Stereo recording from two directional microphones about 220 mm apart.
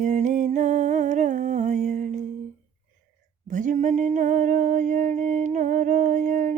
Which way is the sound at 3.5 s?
35° right (ahead or behind).